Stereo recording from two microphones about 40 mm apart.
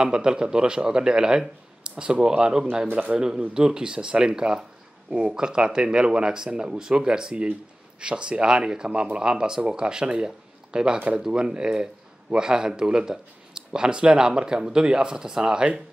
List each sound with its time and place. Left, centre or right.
0.0 s speech: right